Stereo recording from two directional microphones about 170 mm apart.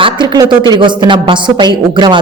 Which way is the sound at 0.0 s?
25° right (ahead or behind).